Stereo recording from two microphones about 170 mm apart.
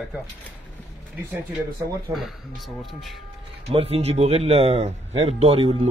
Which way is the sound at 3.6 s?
35° right (ahead or behind).